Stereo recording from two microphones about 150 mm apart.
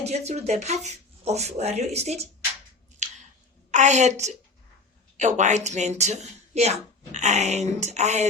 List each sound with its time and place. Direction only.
0.0 s a woman's voice: 45° right (ahead or behind)
3.0 s chewing: 50° right (ahead or behind)
3.7 s a woman's voice: 50° right (ahead or behind)